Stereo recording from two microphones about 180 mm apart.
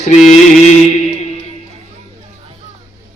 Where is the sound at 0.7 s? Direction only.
40° left (ahead or behind).